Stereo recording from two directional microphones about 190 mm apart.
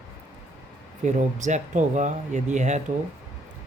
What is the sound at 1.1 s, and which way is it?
Speech, 40° right (ahead or behind).